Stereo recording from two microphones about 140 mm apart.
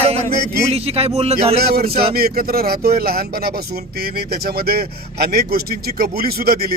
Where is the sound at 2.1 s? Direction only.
90° right.